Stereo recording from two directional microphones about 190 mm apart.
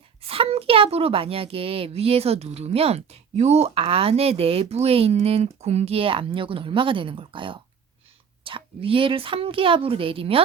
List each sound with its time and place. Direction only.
0.2 s a woman's voice: 30° right (ahead or behind)